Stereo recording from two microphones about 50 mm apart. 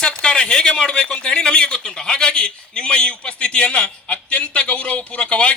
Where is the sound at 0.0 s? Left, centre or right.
Centre.